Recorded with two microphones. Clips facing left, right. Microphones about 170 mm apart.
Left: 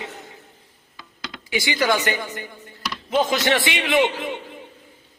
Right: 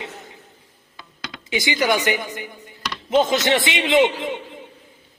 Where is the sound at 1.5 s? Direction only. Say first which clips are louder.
Right 1 dB; 20° right (ahead or behind).